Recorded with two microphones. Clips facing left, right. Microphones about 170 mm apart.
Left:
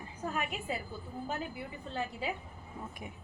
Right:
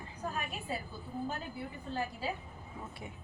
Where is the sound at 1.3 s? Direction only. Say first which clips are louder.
Left 2 dB; 20° left (ahead or behind).